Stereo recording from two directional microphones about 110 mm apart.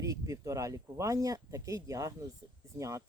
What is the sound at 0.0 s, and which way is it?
Speech, 30° right (ahead or behind).